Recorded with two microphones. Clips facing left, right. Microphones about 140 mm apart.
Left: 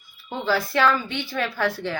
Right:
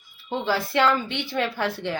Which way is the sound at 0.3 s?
20° right (ahead or behind).